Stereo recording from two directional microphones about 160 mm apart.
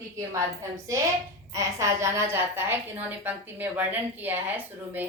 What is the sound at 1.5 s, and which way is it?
A woman's voice, 20° right (ahead or behind).